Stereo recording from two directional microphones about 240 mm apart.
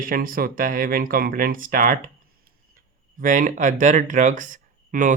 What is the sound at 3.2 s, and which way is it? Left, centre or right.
Speech, right.